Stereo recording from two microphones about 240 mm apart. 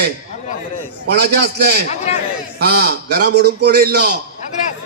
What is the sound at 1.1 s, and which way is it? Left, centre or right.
A man's voice, right.